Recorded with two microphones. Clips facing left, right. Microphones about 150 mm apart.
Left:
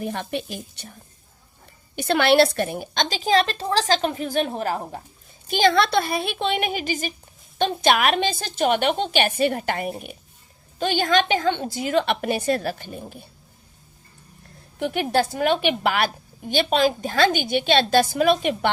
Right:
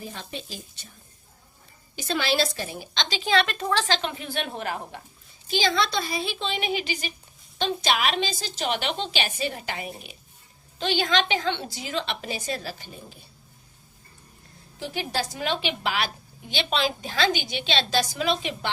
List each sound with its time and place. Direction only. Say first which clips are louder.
0.0 s a woman's voice: left 9 dB; 60° left (ahead or behind)
2.0 s a woman's voice: left 8 dB; 60° left (ahead or behind); by 4.9 s 40° left (ahead or behind)
5.5 s a woman's voice: left 6 dB; 55° left (ahead or behind)
14.8 s a woman's voice: left 8 dB; 55° left (ahead or behind)